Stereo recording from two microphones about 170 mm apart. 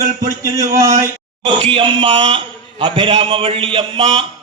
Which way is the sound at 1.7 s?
30° right (ahead or behind).